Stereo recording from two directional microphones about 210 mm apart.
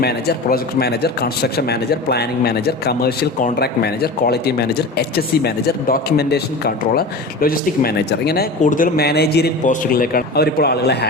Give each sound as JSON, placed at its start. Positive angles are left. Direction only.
{"t": 0.0, "sound": "a man's voice", "side_deg": 50}